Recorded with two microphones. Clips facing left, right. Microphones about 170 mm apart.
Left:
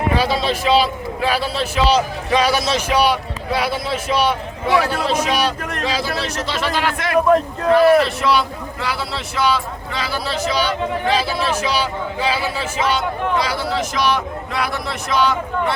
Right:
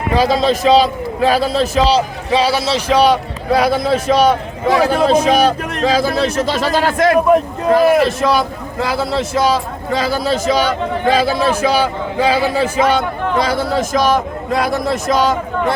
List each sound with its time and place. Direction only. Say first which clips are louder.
0.1 s a man's voice: right 8 dB; 40° right (ahead or behind)
2.9 s a man's voice: right 6 dB; 40° right (ahead or behind)
7.3 s a man's voice: right 3 dB; 15° right (ahead or behind)
7.7 s speech: right 1 dB; 45° right (ahead or behind)